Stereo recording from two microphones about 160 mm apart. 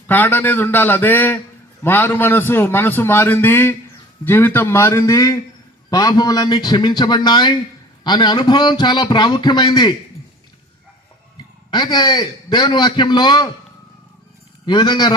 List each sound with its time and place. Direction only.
0.1 s a man's voice: 10° left (ahead or behind); by 9.9 s 25° left (ahead or behind)
11.7 s a man's voice: 25° left (ahead or behind)
14.7 s a man's voice: 30° left (ahead or behind)